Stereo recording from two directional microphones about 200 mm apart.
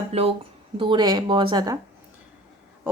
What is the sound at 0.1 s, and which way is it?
Speech, 30° right (ahead or behind).